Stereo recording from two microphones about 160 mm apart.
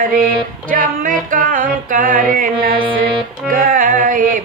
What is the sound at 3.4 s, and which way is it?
Music, 60° right (ahead or behind).